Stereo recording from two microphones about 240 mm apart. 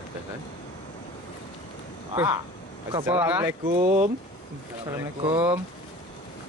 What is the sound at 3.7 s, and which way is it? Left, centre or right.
Speech, right.